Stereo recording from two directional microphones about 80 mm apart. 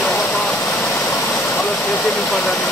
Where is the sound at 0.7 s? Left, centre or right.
Left.